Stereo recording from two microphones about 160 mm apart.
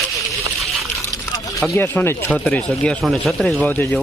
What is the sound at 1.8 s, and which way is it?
Speech, 15° left (ahead or behind).